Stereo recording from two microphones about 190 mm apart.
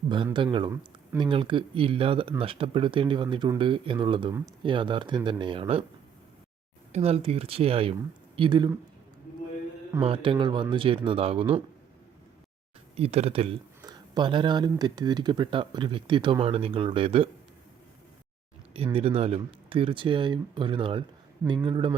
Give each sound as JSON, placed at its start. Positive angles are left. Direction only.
{"t": 0.3, "sound": "speech", "side_deg": -25}
{"t": 6.9, "sound": "speech", "side_deg": -30}
{"t": 10.0, "sound": "speech", "side_deg": -30}
{"t": 13.0, "sound": "speech", "side_deg": -35}
{"t": 18.9, "sound": "speech", "side_deg": -30}